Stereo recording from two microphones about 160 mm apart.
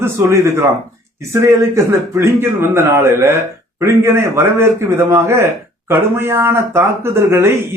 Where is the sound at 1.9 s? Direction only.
15° right (ahead or behind).